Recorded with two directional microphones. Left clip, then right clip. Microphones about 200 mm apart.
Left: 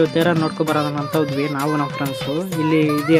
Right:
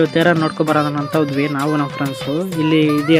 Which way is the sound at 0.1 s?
15° right (ahead or behind).